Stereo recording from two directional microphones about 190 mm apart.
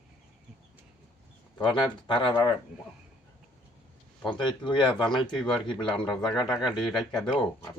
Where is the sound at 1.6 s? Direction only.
25° left (ahead or behind).